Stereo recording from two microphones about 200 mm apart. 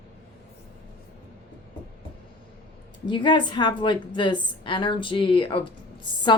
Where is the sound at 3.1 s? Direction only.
25° left (ahead or behind).